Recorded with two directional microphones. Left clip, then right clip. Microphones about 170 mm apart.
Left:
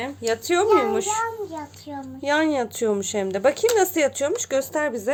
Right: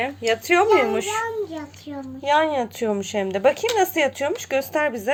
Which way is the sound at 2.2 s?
35° left (ahead or behind).